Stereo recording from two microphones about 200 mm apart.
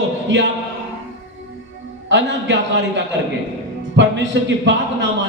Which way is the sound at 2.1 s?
65° right (ahead or behind).